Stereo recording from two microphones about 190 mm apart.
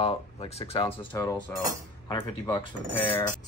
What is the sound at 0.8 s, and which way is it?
Speech, 10° left (ahead or behind).